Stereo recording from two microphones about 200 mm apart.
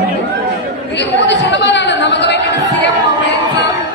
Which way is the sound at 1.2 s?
60° left (ahead or behind).